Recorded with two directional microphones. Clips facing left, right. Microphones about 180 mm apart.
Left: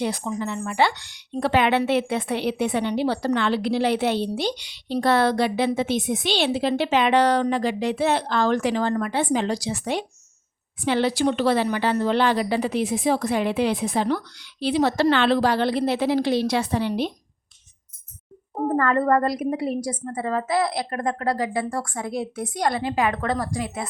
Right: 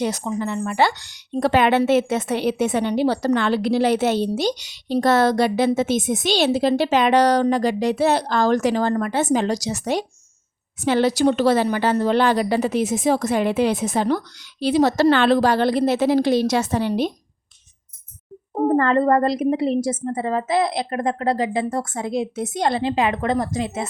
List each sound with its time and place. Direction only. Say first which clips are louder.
0.0 s a woman's voice: right 3 dB; 45° right (ahead or behind)
18.5 s a woman's voice: right 4 dB; 25° right (ahead or behind)